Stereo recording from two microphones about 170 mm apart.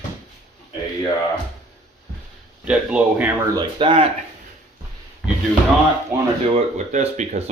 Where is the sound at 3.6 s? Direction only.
30° right (ahead or behind).